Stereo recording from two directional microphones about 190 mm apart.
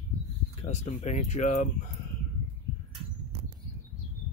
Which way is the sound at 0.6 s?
35° left (ahead or behind).